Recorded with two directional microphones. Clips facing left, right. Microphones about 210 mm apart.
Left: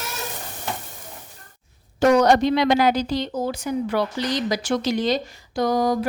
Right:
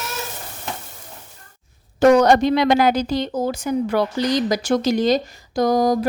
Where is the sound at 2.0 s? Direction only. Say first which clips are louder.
Right 3 dB; 50° right (ahead or behind).